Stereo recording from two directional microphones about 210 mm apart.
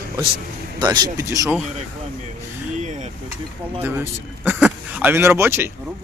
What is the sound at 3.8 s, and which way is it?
Speech, 10° right (ahead or behind).